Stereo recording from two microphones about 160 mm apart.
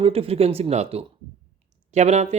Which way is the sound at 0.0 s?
35° right (ahead or behind).